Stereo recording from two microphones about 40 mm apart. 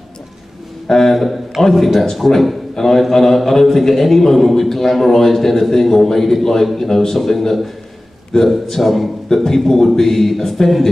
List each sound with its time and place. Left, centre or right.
0.8 s speech: centre
1.1 s a man's voice: centre
2.7 s a man's voice: centre
8.3 s a man's voice: centre
8.6 s a man's voice: centre